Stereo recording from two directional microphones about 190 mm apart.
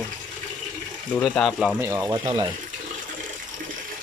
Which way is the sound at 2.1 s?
20° right (ahead or behind).